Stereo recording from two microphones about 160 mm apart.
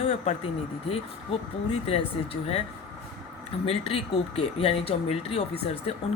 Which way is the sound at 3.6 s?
40° left (ahead or behind).